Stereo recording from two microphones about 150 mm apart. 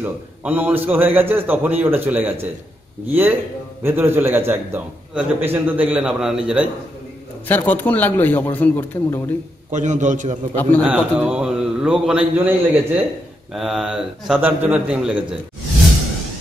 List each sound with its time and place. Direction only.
0.0 s a man's voice: 10° right (ahead or behind)
7.4 s a man's voice: 10° left (ahead or behind)
9.7 s a man's voice: 55° right (ahead or behind)
10.5 s a man's voice: 10° left (ahead or behind)
10.8 s a man's voice: 5° right (ahead or behind)
13.5 s a man's voice: centre (ahead or behind)